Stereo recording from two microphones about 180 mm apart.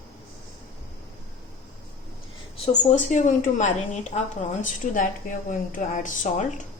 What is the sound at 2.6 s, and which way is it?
A woman's voice, 40° left (ahead or behind).